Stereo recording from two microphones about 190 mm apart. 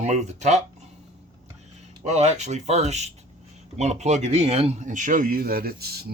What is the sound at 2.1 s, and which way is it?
Speech, 35° right (ahead or behind).